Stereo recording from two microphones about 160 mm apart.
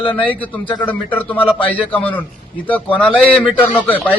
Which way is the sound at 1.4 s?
35° left (ahead or behind).